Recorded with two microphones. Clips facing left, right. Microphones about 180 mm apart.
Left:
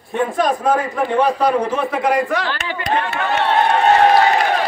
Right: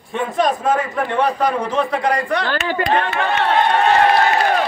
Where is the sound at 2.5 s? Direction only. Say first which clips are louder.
Right 4 dB; 45° right (ahead or behind).